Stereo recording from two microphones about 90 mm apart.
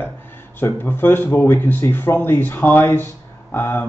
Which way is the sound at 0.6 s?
25° left (ahead or behind).